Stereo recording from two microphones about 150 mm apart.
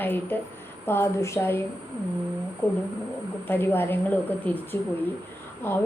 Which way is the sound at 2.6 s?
15° left (ahead or behind).